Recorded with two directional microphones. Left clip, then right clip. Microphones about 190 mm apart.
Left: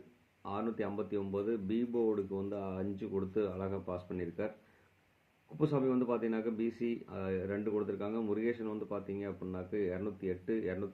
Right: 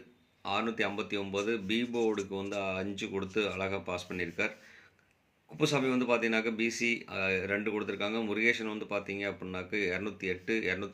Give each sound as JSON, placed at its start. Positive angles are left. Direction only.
{"t": 0.4, "sound": "speech", "side_deg": -10}
{"t": 5.5, "sound": "speech", "side_deg": -10}